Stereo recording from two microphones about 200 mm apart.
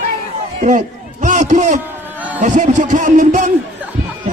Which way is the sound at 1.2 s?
40° right (ahead or behind).